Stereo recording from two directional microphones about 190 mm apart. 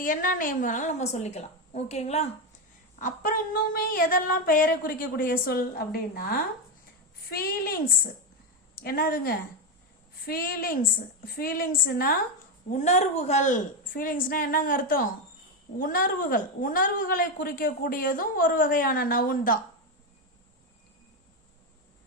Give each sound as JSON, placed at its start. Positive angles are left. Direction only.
{"t": 0.0, "sound": "a woman's voice", "side_deg": 45}
{"t": 3.0, "sound": "a woman's voice", "side_deg": 45}
{"t": 7.3, "sound": "a woman's voice", "side_deg": 55}
{"t": 12.7, "sound": "a woman's voice", "side_deg": 40}